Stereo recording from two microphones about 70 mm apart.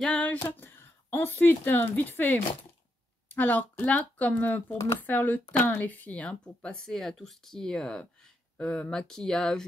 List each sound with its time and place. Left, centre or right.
0.0 s speech: centre